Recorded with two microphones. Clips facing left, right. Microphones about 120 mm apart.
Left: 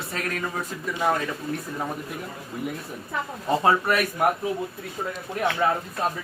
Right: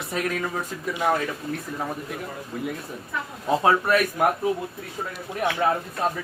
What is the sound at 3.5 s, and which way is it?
Speech, centre (ahead or behind).